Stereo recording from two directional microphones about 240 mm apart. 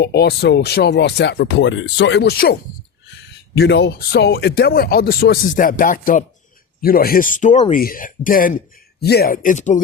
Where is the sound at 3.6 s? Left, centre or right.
Left.